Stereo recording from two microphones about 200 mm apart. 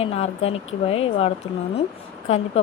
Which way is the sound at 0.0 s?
30° left (ahead or behind).